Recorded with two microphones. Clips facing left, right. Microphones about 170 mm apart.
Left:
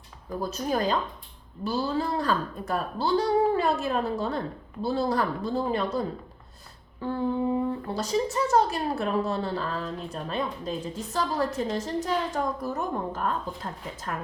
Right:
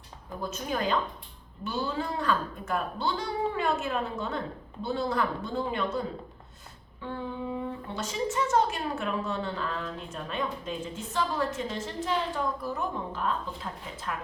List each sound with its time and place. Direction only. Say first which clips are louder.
0.3 s a woman's voice: left 4 dB; 35° left (ahead or behind)
7.0 s a woman's voice: left 8 dB; 40° left (ahead or behind)